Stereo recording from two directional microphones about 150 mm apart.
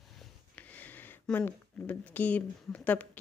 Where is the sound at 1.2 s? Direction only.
10° left (ahead or behind).